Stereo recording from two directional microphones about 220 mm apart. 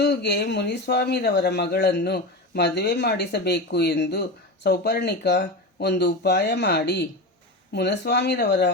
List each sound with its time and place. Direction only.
0.0 s speech: 50° left (ahead or behind)